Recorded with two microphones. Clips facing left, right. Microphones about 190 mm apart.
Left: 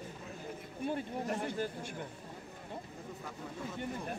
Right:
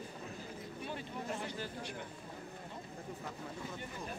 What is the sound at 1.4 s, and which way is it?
Speech, 50° left (ahead or behind).